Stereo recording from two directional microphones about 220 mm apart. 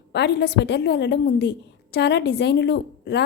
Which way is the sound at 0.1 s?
50° left (ahead or behind).